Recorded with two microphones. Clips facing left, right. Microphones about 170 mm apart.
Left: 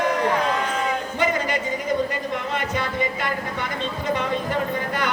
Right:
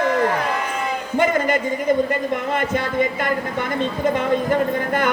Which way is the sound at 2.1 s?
50° right (ahead or behind).